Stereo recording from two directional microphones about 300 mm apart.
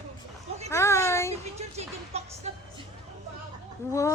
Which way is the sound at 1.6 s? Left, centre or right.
Right.